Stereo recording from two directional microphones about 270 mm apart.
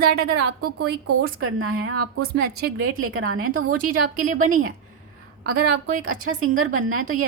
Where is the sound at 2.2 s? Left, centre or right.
Right.